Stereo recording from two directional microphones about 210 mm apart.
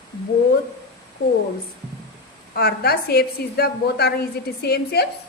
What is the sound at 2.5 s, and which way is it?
A woman's voice, 50° left (ahead or behind).